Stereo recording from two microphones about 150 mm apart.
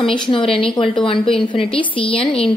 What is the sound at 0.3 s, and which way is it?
A woman's voice, 35° left (ahead or behind).